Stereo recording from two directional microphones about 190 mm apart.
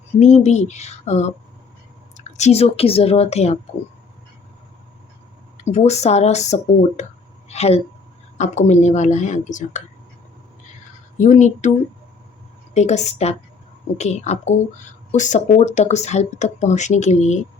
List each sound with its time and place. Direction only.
0.2 s speech: 40° left (ahead or behind)
5.5 s speech: 35° left (ahead or behind)
7.4 s a sound: 35° left (ahead or behind)
8.4 s speech: 40° left (ahead or behind)
11.2 s speech: 40° left (ahead or behind)
12.7 s speech: 35° left (ahead or behind)